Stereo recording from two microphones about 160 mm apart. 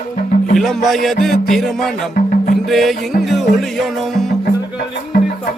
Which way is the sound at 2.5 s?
Centre (ahead or behind).